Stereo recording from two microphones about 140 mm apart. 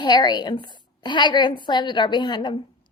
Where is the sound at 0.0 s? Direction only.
30° left (ahead or behind).